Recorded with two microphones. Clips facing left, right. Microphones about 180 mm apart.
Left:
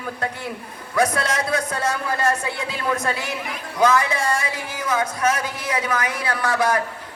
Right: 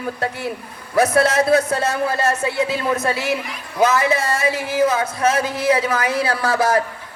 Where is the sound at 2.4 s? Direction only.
25° right (ahead or behind).